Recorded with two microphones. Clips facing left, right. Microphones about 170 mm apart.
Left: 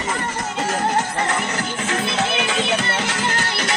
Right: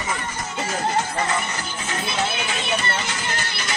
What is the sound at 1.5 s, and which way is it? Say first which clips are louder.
Music: left 6 dB; 85° left.